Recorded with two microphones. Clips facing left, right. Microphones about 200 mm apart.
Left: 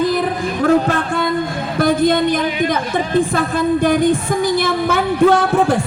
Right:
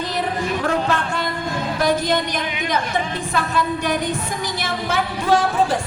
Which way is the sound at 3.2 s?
50° left (ahead or behind).